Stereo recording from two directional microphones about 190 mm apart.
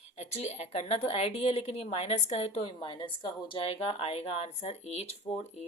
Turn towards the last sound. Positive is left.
turn(degrees=35)  # may be behind; listen again after turning